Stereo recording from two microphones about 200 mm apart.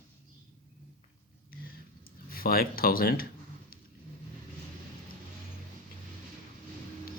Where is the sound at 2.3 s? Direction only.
45° left (ahead or behind).